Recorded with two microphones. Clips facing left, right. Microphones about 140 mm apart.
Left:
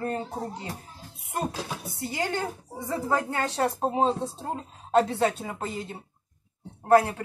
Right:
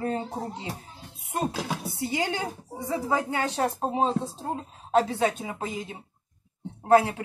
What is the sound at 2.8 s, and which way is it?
A woman's voice, 10° right (ahead or behind).